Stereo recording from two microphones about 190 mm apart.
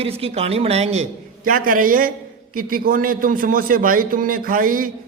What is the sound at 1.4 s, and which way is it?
A man's voice, 45° right (ahead or behind).